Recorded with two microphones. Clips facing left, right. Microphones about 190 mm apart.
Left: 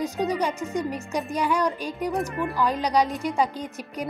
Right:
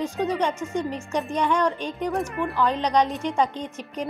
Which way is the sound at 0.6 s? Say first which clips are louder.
Even; 35° left (ahead or behind).